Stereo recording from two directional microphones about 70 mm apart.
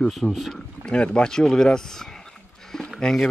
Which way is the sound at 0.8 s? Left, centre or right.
Centre.